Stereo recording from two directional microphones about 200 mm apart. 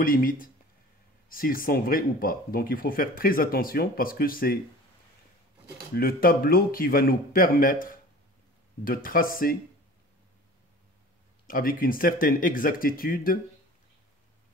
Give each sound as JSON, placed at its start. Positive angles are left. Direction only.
{"t": 0.0, "sound": "speech", "side_deg": 45}
{"t": 5.9, "sound": "speech", "side_deg": 50}
{"t": 11.4, "sound": "speech", "side_deg": 45}